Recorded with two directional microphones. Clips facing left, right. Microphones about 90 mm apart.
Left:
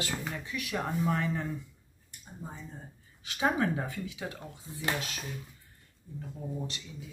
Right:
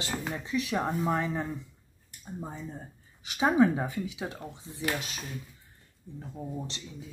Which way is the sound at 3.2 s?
15° right (ahead or behind).